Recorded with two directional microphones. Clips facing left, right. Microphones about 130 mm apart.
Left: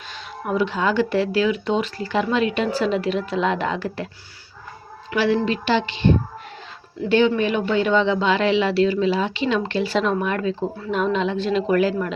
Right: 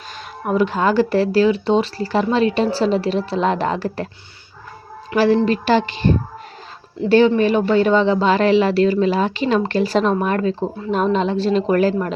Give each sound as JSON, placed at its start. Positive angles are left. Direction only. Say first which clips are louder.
{"t": 0.4, "sound": "speech", "louder": "right 4 dB", "side_deg": -45}
{"t": 5.1, "sound": "a woman's voice", "louder": "right 5 dB", "side_deg": -40}